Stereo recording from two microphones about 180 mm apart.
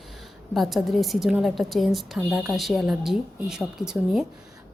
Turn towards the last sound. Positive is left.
turn(degrees=-5)  # may be behind; listen again after turning